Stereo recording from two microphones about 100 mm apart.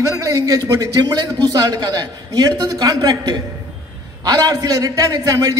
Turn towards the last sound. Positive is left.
turn(degrees=-35)  # may be behind; listen again after turning